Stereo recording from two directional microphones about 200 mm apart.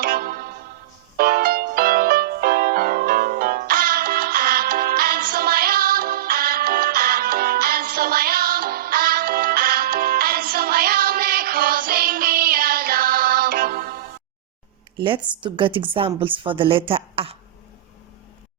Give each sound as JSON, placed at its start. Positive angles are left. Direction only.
{"t": 0.0, "sound": "music", "side_deg": -45}
{"t": 15.0, "sound": "a woman's voice", "side_deg": -25}